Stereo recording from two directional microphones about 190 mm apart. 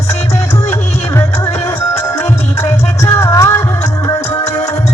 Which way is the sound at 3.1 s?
15° left (ahead or behind).